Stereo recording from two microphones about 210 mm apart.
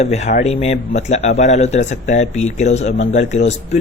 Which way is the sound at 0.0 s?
30° left (ahead or behind).